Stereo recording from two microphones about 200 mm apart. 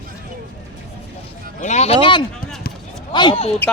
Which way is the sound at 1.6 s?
35° left (ahead or behind).